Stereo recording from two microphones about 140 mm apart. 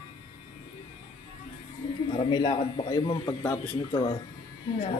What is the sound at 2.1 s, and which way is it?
A man's voice, 35° left (ahead or behind).